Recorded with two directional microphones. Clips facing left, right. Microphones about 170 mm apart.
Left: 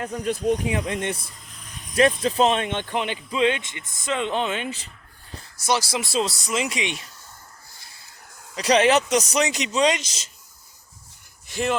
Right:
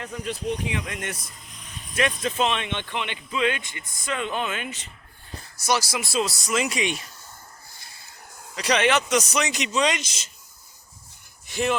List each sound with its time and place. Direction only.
0.0 s speech: 45° left (ahead or behind); by 7.0 s 20° left (ahead or behind)
8.5 s speech: 35° left (ahead or behind)
11.5 s speech: 35° left (ahead or behind)